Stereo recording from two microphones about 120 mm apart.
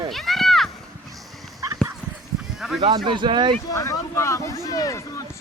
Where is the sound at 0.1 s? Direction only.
Centre (ahead or behind).